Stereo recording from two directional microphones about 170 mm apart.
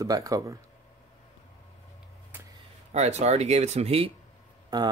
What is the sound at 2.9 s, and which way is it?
Speech, 40° right (ahead or behind).